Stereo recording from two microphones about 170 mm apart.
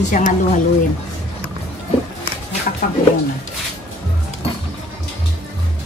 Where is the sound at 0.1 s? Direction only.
50° left (ahead or behind).